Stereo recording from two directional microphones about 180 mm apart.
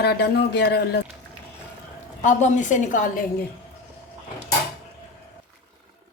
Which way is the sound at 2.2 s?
40° left (ahead or behind).